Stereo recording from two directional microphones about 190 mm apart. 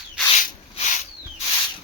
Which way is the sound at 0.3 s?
40° left (ahead or behind).